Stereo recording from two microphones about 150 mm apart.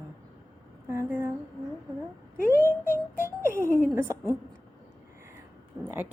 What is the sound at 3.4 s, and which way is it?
Speech, 15° right (ahead or behind).